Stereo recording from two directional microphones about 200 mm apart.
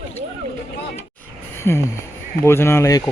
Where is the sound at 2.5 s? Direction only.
10° left (ahead or behind).